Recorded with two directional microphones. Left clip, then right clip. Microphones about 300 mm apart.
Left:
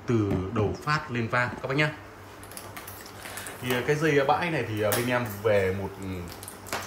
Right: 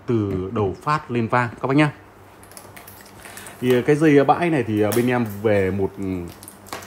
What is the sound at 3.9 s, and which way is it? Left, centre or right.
Speech, right.